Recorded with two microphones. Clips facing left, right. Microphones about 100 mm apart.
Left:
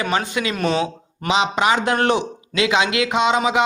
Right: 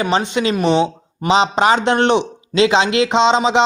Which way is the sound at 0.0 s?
25° right (ahead or behind).